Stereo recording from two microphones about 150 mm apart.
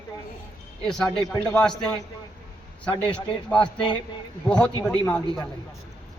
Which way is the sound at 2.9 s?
10° left (ahead or behind).